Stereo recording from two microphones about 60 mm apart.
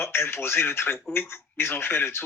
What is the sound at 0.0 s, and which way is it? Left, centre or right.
Speech, left.